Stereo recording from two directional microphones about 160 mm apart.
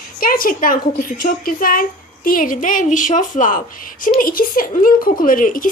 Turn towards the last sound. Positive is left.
turn(degrees=55)  # may be behind; listen again after turning